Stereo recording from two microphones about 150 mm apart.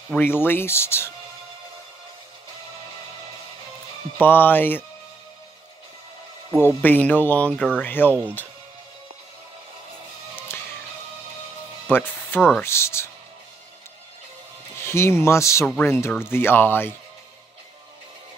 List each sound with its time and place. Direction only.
0.1 s speech: 15° left (ahead or behind)
4.2 s speech: 10° left (ahead or behind)
6.8 s speech: 10° left (ahead or behind)
11.9 s speech: 15° left (ahead or behind)
14.8 s speech: 15° left (ahead or behind)
15.6 s speech: 5° left (ahead or behind)
15.9 s speech: 15° left (ahead or behind)